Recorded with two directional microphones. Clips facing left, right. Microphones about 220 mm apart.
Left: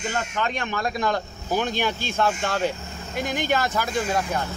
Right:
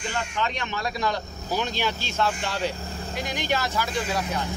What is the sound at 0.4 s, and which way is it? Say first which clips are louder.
Speech: left 2 dB; 50° left (ahead or behind).